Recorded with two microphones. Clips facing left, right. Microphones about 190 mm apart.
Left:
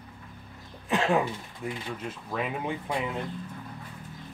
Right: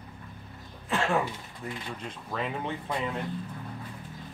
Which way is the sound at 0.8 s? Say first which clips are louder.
Left 2 dB; 15° left (ahead or behind).